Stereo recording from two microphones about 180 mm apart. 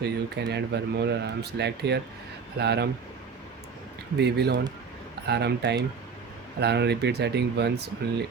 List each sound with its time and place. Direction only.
0.0 s speech: 70° right (ahead or behind)
4.2 s speech: 65° right (ahead or behind)